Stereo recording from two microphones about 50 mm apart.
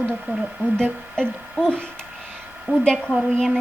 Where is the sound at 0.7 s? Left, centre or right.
Centre.